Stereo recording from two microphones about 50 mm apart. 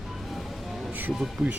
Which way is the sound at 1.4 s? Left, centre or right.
Centre.